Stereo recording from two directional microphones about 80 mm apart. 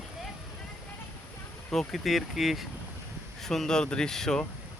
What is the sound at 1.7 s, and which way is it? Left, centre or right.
Speech, centre.